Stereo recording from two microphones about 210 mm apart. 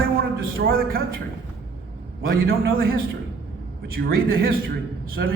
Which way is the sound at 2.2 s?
45° right (ahead or behind).